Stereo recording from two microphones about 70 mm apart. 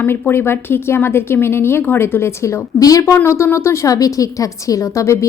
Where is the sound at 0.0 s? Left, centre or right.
Left.